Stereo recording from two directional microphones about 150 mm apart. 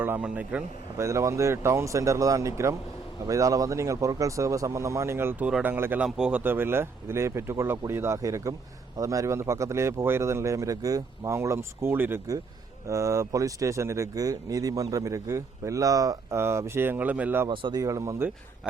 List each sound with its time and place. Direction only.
0.0 s speech: 10° right (ahead or behind)
0.9 s speech: 20° right (ahead or behind)
17.5 s speech: 30° right (ahead or behind)
18.6 s speech: 5° right (ahead or behind)